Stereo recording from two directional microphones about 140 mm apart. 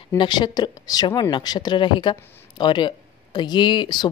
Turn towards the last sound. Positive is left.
turn(degrees=30)  # may be behind; listen again after turning